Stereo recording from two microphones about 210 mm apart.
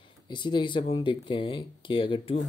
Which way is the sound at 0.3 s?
20° left (ahead or behind).